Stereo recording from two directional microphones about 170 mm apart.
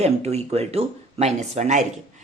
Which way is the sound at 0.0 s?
40° right (ahead or behind).